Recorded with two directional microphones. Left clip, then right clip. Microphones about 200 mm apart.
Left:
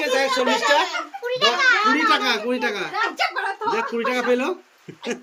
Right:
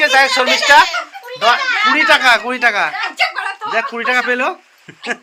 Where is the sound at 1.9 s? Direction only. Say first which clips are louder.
Right 8 dB; 5° left (ahead or behind).